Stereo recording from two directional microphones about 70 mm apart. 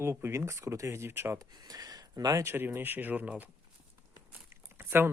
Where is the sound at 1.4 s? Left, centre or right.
Right.